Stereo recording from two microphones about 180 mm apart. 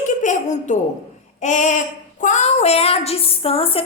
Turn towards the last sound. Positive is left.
turn(degrees=30)  # may be behind; listen again after turning